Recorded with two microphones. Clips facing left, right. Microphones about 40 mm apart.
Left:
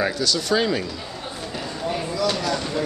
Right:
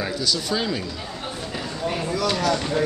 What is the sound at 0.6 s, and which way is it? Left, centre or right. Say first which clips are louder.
Speech: left 4 dB; centre.